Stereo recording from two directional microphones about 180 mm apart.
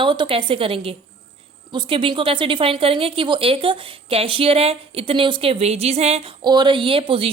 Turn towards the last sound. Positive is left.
turn(degrees=-30)  # may be behind; listen again after turning